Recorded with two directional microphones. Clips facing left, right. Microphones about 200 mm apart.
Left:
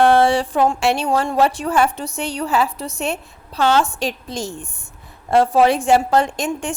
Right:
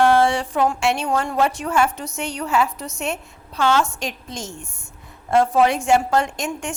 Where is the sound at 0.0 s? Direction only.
35° left (ahead or behind).